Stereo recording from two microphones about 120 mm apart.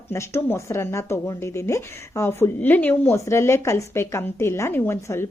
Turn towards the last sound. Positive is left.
turn(degrees=20)  # may be behind; listen again after turning